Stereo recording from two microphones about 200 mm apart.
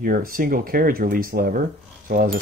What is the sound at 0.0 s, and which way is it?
Speech, 45° right (ahead or behind).